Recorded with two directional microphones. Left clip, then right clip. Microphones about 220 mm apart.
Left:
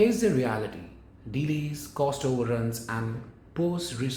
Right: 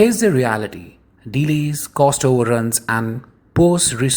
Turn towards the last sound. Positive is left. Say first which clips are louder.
# right 14 dB
turn(degrees=-50)  # may be behind; listen again after turning